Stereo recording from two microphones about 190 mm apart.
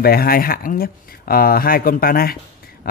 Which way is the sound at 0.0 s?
55° left (ahead or behind).